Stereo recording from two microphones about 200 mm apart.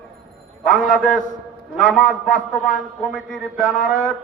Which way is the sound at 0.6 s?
40° left (ahead or behind).